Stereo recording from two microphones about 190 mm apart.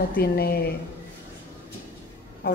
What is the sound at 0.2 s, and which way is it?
Speech, 55° left (ahead or behind).